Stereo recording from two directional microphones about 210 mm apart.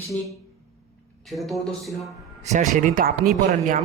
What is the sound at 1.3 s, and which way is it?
Speech, centre (ahead or behind).